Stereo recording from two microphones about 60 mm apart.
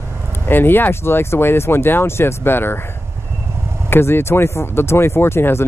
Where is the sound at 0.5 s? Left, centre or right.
Left.